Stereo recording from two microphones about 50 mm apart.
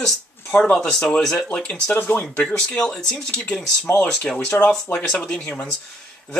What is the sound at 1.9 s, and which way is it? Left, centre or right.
Speech, left.